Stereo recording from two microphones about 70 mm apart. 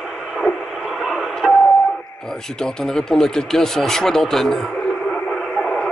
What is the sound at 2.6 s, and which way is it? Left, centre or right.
Speech, centre.